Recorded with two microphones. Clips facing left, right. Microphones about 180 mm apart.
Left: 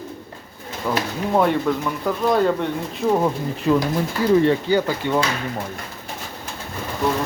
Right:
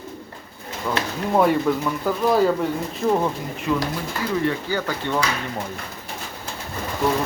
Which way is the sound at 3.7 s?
35° left (ahead or behind).